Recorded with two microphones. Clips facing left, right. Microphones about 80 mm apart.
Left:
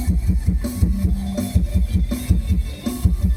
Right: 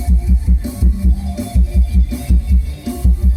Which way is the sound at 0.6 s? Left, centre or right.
Left.